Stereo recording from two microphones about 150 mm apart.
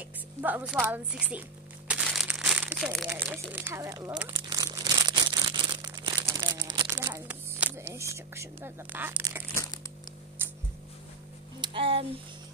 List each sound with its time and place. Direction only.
0.4 s speech: 10° right (ahead or behind)
1.9 s crumpling: 5° right (ahead or behind)
2.8 s speech: centre (ahead or behind)
3.1 s speech: 15° right (ahead or behind)
4.5 s a sound: 30° right (ahead or behind)
6.2 s crumpling: 25° right (ahead or behind)
10.4 s a sound: 15° right (ahead or behind)
11.6 s speech: 35° right (ahead or behind)